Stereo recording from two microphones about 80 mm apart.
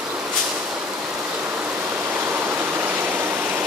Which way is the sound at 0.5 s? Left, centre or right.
Centre.